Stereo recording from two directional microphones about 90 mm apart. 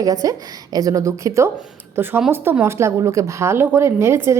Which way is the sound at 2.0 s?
20° right (ahead or behind).